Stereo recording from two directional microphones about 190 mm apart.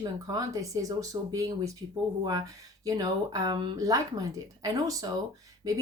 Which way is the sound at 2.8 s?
20° right (ahead or behind).